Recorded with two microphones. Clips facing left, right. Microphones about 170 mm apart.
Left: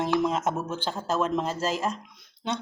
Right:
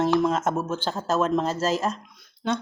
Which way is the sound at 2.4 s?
20° left (ahead or behind).